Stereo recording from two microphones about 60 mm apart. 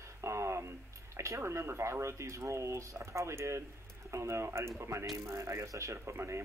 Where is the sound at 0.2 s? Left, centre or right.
Right.